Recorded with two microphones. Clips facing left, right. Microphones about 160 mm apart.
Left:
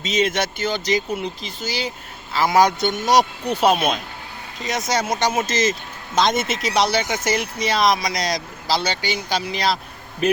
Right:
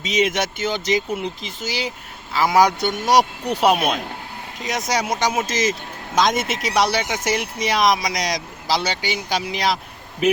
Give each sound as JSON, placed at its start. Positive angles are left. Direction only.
{"t": 0.0, "sound": "speech", "side_deg": -15}